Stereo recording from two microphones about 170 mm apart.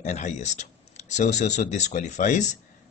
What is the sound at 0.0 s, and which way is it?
Speech, 45° left (ahead or behind).